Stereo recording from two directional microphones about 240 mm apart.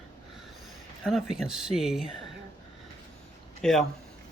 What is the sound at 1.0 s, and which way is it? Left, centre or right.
Speech, centre.